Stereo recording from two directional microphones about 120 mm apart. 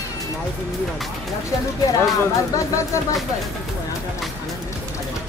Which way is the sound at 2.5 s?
25° left (ahead or behind).